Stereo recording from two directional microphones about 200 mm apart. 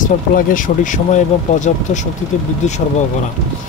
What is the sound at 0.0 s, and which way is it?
Speech, 40° left (ahead or behind).